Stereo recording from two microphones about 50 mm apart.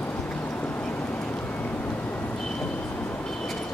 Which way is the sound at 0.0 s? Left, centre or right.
Left.